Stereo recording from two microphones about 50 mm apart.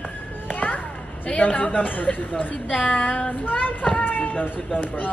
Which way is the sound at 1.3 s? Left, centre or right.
Left.